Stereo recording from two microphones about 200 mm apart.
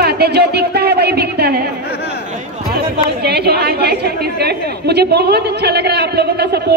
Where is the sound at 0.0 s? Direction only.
55° right (ahead or behind).